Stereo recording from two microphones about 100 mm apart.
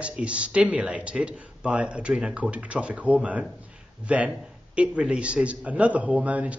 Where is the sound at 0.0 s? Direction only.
10° right (ahead or behind).